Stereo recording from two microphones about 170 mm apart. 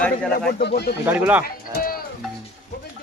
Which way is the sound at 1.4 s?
60° left (ahead or behind).